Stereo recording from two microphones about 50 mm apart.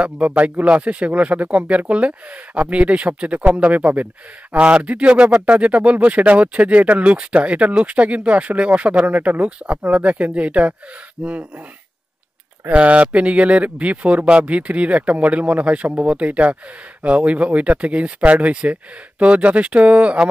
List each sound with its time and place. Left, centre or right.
0.0 s speech: right
12.6 s speech: right